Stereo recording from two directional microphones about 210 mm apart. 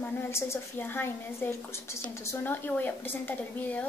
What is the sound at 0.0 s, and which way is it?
A woman's voice, 10° left (ahead or behind).